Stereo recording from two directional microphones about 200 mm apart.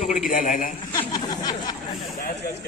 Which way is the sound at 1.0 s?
20° left (ahead or behind).